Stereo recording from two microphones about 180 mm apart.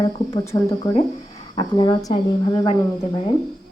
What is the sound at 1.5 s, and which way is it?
Speech, 25° left (ahead or behind).